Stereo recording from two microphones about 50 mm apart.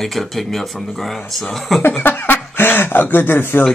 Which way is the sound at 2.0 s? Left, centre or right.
Left.